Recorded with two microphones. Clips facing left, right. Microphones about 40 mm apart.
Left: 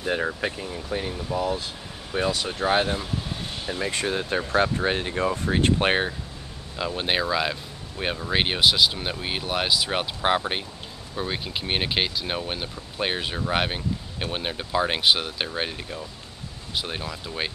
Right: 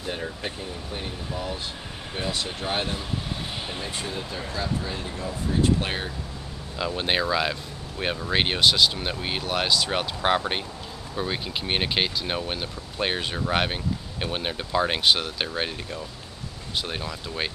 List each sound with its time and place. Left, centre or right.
0.0 s speech: left
2.6 s speech: left
6.8 s speech: centre